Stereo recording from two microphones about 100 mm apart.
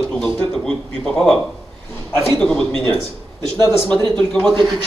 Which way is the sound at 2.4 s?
5° left (ahead or behind).